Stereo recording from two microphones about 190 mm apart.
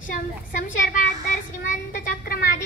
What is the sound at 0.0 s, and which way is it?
Child singing, 45° left (ahead or behind).